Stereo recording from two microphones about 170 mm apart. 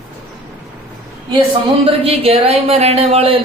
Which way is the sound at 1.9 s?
35° right (ahead or behind).